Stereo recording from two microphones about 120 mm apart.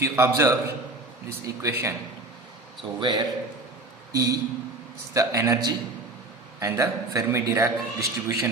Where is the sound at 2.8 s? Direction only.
40° right (ahead or behind).